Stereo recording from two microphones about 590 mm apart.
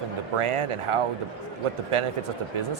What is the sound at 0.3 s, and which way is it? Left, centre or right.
Speech, right.